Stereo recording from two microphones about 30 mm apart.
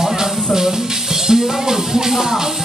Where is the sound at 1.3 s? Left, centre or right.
Right.